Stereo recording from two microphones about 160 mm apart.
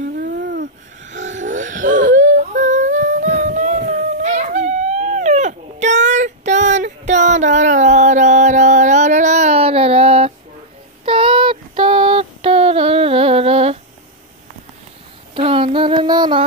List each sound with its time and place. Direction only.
0.0 s a sound: 65° right (ahead or behind)
1.1 s whimper: 50° right (ahead or behind)
11.1 s female singing: 35° right (ahead or behind)
15.3 s child singing: 35° right (ahead or behind)